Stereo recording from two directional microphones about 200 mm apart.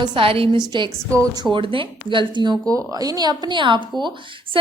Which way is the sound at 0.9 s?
15° right (ahead or behind).